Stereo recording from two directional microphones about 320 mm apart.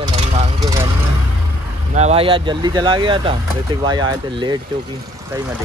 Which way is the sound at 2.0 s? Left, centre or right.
Centre.